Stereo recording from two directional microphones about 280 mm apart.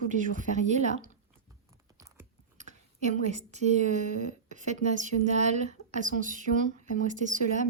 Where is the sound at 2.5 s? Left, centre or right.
Right.